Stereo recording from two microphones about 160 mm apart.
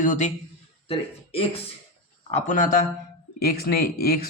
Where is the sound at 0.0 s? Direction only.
50° left (ahead or behind).